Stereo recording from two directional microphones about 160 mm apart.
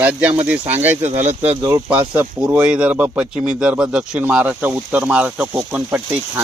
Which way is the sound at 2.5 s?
5° right (ahead or behind).